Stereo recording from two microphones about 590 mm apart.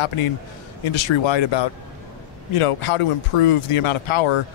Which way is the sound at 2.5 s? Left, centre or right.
Left.